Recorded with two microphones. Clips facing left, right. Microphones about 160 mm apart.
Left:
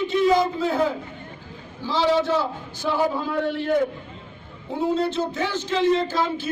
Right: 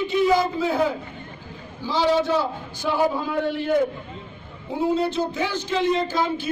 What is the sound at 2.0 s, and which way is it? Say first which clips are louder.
A man's voice: even; centre (ahead or behind).